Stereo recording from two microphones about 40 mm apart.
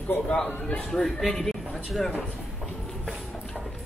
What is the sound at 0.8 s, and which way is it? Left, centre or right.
Speech, centre.